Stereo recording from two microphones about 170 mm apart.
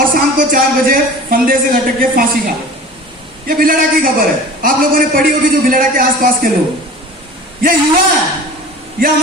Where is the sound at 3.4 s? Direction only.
55° right (ahead or behind).